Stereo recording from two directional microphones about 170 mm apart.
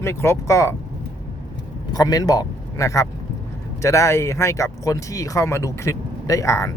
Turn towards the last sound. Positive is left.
turn(degrees=20)  # may be behind; listen again after turning